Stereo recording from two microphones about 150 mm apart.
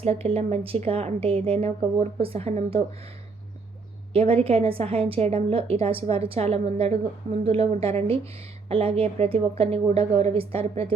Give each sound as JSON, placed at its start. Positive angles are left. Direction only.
{"t": 0.0, "sound": "a woman's voice", "side_deg": -40}
{"t": 4.1, "sound": "a woman's voice", "side_deg": -40}